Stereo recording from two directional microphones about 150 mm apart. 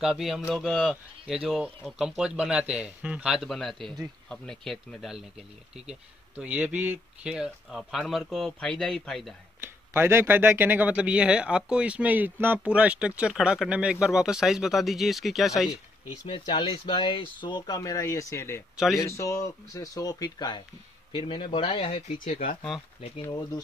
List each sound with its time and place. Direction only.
0.0 s speech: centre (ahead or behind)
9.9 s speech: 15° right (ahead or behind)
16.3 s speech: 35° left (ahead or behind)
22.7 s speech: centre (ahead or behind)